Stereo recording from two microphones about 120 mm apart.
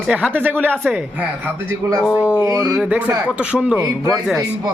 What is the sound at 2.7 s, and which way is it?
Speech, 10° right (ahead or behind).